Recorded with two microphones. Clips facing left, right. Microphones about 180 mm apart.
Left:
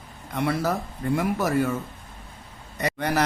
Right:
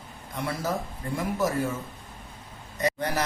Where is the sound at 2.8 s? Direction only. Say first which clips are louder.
Left 2 dB; 65° left (ahead or behind).